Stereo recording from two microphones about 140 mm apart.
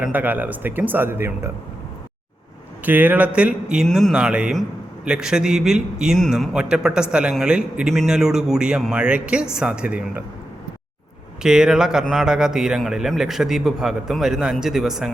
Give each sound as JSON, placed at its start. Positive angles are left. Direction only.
{"t": 0.0, "sound": "speech", "side_deg": -10}
{"t": 2.8, "sound": "a man's voice", "side_deg": -10}
{"t": 11.4, "sound": "a man's voice", "side_deg": -5}